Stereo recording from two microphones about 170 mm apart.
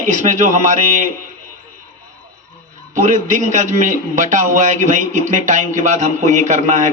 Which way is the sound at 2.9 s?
50° right (ahead or behind).